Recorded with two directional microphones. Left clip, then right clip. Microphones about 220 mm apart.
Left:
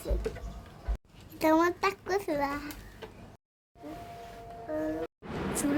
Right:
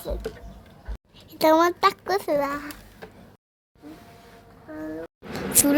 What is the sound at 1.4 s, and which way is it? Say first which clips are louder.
A child's voice: right 7 dB; 25° right (ahead or behind).